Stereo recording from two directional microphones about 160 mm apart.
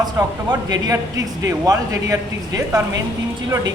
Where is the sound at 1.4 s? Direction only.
20° right (ahead or behind).